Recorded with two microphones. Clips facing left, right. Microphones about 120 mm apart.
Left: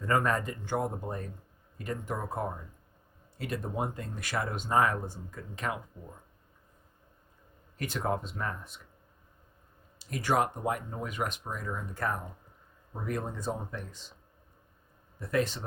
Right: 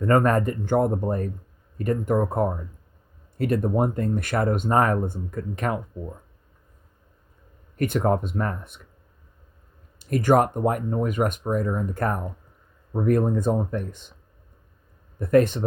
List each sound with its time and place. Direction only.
0.0 s speech: 55° right (ahead or behind)
7.8 s speech: 55° right (ahead or behind)
10.0 s speech: 50° right (ahead or behind)
15.2 s speech: 55° right (ahead or behind)